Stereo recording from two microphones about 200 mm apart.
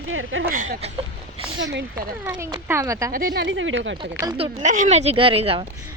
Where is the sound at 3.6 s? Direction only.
70° right (ahead or behind).